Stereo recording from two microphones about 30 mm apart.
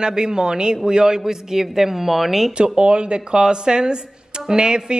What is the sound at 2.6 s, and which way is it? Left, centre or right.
A man's voice, right.